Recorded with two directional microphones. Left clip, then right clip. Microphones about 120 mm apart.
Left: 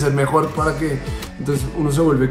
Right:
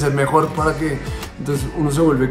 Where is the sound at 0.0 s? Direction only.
15° right (ahead or behind).